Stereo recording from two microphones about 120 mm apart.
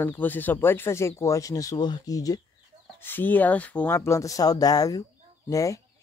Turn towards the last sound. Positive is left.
turn(degrees=25)  # may be behind; listen again after turning